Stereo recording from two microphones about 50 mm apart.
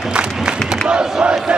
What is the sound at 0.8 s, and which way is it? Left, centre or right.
Speech, centre.